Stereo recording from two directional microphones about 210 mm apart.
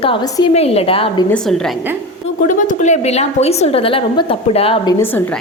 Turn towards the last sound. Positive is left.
turn(degrees=25)  # may be behind; listen again after turning